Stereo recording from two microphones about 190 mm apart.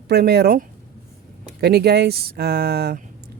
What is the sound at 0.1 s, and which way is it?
Speech, 55° right (ahead or behind).